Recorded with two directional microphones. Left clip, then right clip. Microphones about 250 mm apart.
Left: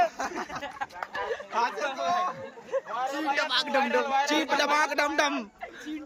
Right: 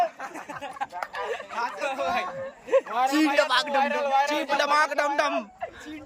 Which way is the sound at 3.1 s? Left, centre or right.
Right.